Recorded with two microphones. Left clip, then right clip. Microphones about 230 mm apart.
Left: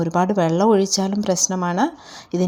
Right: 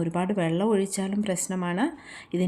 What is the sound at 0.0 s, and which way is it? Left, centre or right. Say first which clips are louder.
Speech: left 9 dB; centre.